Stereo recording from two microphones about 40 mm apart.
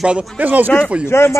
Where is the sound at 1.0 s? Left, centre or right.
Left.